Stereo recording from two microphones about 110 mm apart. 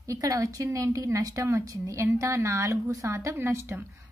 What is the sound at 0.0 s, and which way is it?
A woman's voice, 30° right (ahead or behind).